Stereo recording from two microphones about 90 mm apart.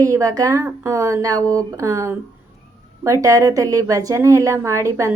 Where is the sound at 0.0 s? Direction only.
40° right (ahead or behind).